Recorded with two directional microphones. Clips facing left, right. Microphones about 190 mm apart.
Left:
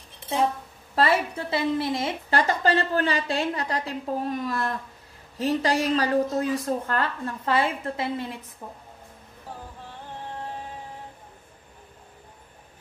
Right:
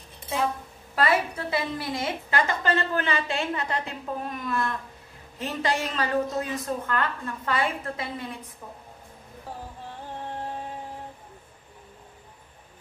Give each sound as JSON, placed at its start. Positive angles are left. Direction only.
{"t": 0.9, "sound": "a woman's voice", "side_deg": 25}